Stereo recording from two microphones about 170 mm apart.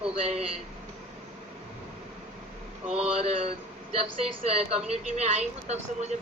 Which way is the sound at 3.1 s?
35° right (ahead or behind).